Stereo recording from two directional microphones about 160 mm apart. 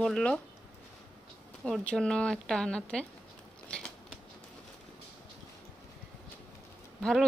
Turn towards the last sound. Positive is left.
turn(degrees=5)  # may be behind; listen again after turning